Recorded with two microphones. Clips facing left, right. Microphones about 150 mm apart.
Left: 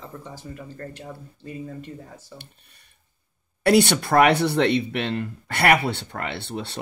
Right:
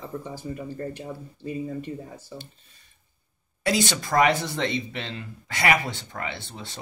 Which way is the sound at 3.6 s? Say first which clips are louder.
Left 7 dB; 60° left (ahead or behind).